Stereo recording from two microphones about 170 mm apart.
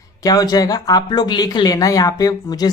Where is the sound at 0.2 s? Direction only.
20° left (ahead or behind).